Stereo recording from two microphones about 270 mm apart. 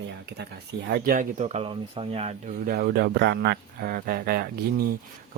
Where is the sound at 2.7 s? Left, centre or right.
Right.